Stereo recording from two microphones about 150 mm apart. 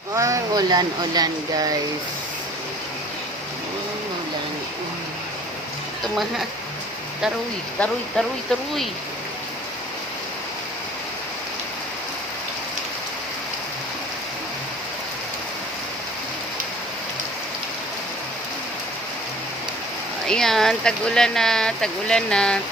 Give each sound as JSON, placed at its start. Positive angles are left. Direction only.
{"t": 0.1, "sound": "speech", "side_deg": -20}
{"t": 7.8, "sound": "speech", "side_deg": 0}
{"t": 20.2, "sound": "speech", "side_deg": 5}